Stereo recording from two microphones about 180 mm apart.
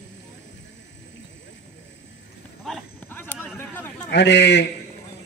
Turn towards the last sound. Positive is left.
turn(degrees=75)  # may be behind; listen again after turning